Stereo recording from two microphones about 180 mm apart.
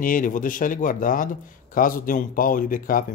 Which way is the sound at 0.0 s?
50° left (ahead or behind).